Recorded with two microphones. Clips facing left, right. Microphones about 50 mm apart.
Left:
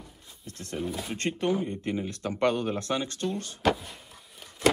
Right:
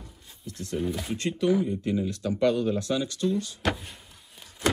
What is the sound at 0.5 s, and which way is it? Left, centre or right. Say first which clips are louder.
A man's voice: right 3 dB; left.